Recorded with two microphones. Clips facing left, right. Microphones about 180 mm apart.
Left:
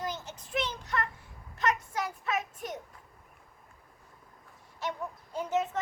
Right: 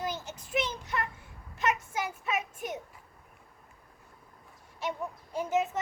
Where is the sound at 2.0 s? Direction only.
10° right (ahead or behind).